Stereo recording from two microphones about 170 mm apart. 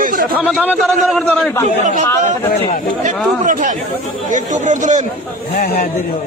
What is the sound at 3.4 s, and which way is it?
Speech, 50° right (ahead or behind).